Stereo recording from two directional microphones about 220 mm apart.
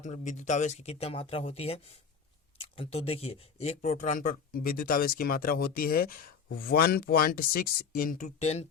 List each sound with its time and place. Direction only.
0.0 s speech: 30° left (ahead or behind)